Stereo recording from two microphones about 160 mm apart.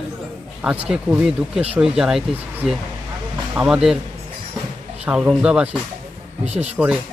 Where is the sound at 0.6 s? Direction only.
5° right (ahead or behind).